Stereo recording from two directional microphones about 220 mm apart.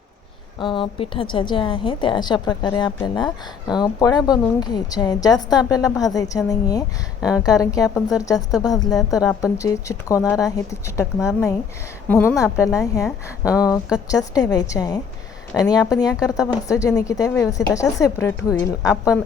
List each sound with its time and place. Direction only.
0.6 s a woman's voice: 20° left (ahead or behind)
9.0 s a woman's voice: centre (ahead or behind)
9.4 s a woman's voice: 15° left (ahead or behind)
12.0 s a woman's voice: 10° left (ahead or behind)